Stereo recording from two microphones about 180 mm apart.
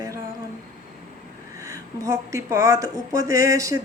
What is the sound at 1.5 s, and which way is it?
A woman's voice, 20° right (ahead or behind).